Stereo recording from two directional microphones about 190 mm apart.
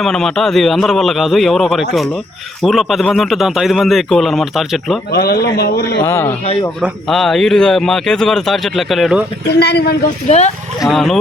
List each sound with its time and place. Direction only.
0.0 s a man's voice: centre (ahead or behind)
5.1 s a man's voice: 55° left (ahead or behind)
6.0 s a man's voice: 15° left (ahead or behind)
6.8 s a man's voice: centre (ahead or behind)
9.5 s a man's voice: 60° left (ahead or behind)
10.2 s speech: 35° left (ahead or behind)
10.8 s a man's voice: centre (ahead or behind)